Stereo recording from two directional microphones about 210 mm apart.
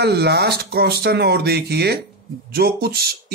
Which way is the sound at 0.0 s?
50° right (ahead or behind).